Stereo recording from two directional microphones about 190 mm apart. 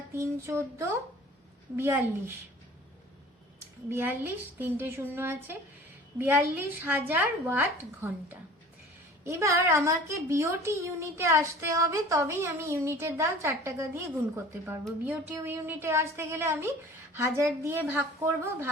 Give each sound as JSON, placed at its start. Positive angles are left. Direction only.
{"t": 0.1, "sound": "a woman's voice", "side_deg": -15}
{"t": 3.8, "sound": "a woman's voice", "side_deg": -10}
{"t": 9.2, "sound": "a woman's voice", "side_deg": -15}
{"t": 15.0, "sound": "a woman's voice", "side_deg": -10}